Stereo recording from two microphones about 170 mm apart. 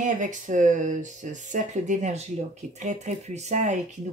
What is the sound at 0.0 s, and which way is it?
Speech, 45° right (ahead or behind).